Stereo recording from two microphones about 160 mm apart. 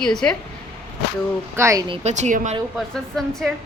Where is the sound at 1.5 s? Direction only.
15° right (ahead or behind).